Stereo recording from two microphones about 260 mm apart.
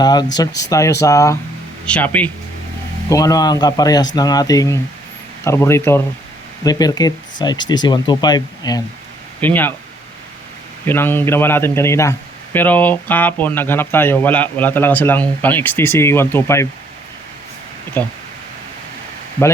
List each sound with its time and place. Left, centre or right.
0.0 s speech: centre
10.8 s speech: centre
18.0 s speech: centre